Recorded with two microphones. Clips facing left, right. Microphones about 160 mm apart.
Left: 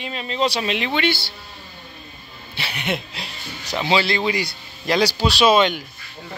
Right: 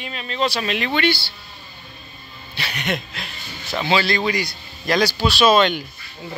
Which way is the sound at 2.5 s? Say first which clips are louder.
Even; 10° left (ahead or behind).